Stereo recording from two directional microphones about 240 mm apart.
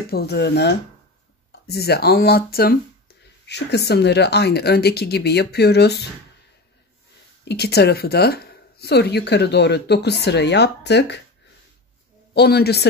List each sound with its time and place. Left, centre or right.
0.1 s a woman's voice: left
7.4 s a woman's voice: left
12.4 s speech: left